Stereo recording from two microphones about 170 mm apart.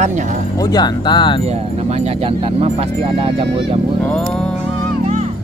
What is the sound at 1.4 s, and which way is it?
Speech, 40° right (ahead or behind).